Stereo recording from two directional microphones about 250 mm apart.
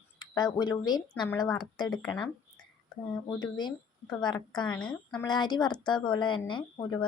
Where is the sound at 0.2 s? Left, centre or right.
Centre.